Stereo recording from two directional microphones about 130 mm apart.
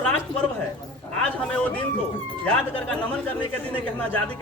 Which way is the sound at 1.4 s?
10° left (ahead or behind).